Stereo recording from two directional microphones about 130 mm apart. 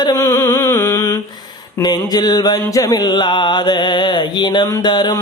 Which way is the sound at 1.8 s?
30° left (ahead or behind).